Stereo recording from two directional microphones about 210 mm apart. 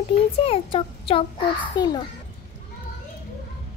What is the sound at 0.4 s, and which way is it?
A child's voice, 25° left (ahead or behind).